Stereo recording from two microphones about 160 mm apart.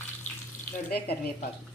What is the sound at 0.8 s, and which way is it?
Speech, 75° left (ahead or behind).